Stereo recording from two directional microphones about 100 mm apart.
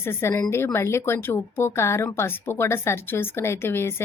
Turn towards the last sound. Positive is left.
turn(degrees=25)  # may be behind; listen again after turning